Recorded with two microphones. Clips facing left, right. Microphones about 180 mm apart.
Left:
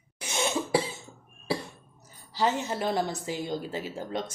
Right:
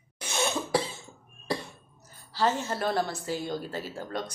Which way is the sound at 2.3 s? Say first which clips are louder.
Even; 15° left (ahead or behind).